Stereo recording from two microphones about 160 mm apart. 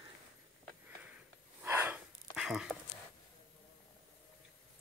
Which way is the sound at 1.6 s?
10° right (ahead or behind).